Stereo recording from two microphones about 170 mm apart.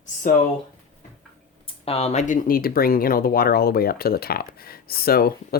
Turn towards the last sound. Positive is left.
turn(degrees=60)  # may be behind; listen again after turning